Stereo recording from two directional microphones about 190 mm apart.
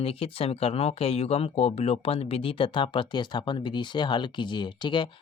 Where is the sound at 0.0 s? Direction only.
30° left (ahead or behind).